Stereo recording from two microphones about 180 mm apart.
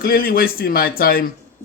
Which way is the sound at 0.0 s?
55° left (ahead or behind).